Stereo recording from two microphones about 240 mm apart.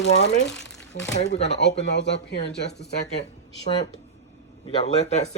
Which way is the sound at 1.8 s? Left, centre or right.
Left.